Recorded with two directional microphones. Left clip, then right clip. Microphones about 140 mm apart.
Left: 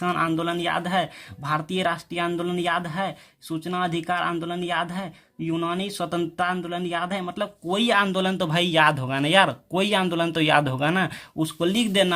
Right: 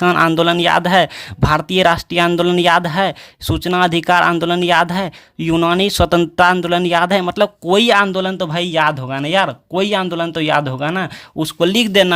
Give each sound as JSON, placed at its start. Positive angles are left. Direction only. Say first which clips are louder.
{"t": 0.0, "sound": "speech", "louder": "right 11 dB", "side_deg": -55}
{"t": 8.0, "sound": "speech", "louder": "right 6 dB", "side_deg": -25}
{"t": 11.3, "sound": "speech", "louder": "right 9 dB", "side_deg": -45}